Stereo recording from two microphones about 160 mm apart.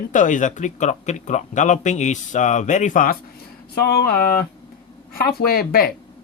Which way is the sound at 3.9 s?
70° left (ahead or behind).